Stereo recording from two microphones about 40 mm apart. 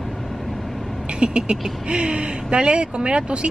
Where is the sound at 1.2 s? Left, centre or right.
Right.